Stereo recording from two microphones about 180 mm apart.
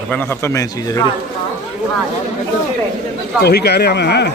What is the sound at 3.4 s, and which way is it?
Speech, 60° left (ahead or behind).